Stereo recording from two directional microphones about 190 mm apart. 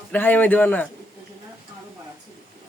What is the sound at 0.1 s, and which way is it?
Speech, 10° left (ahead or behind).